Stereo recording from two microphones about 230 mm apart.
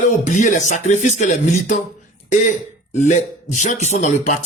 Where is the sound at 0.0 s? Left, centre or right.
Left.